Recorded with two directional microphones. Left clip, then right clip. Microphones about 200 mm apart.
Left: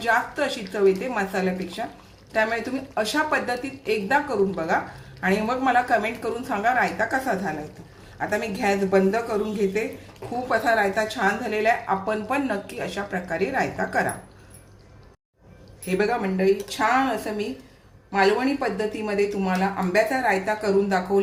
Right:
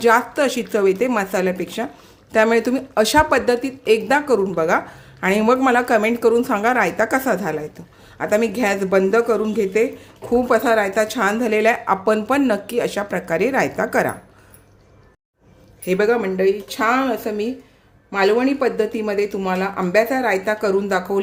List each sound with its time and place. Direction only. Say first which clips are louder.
0.0 s speech: right 7 dB; 55° right (ahead or behind)
15.9 s speech: right 6 dB; 60° right (ahead or behind)